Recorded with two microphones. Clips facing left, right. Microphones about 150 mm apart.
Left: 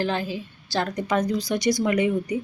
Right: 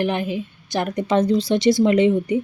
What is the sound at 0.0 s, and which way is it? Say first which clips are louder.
A woman's voice: right 4 dB; 20° right (ahead or behind).